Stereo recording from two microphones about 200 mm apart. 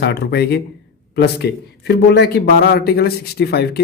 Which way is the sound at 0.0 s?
55° left (ahead or behind).